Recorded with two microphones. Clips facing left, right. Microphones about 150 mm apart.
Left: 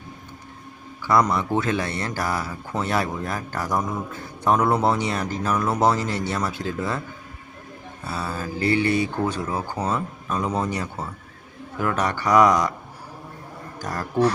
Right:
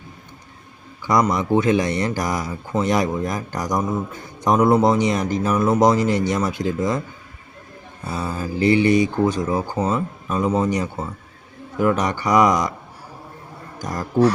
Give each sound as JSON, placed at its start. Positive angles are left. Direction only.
{"t": 1.0, "sound": "speech", "side_deg": -15}
{"t": 8.1, "sound": "speech", "side_deg": -15}
{"t": 13.7, "sound": "speech", "side_deg": -15}